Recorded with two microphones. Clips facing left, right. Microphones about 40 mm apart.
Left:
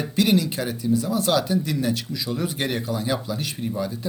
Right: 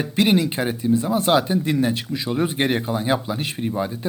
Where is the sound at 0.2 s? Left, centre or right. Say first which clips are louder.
Right 2 dB; right.